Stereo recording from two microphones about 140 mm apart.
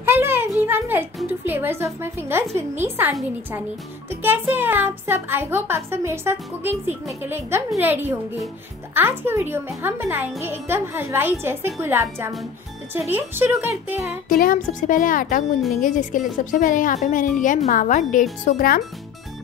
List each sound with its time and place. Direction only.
0.0 s music: 15° right (ahead or behind)
2.5 s a child's voice: 15° right (ahead or behind)
14.3 s speech: 90° left; by 18.2 s 65° left (ahead or behind)
18.4 s speech: 90° left